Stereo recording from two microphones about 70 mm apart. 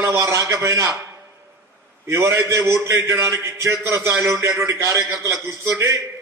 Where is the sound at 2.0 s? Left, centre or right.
Right.